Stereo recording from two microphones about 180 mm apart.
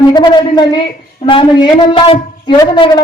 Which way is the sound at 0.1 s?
25° left (ahead or behind).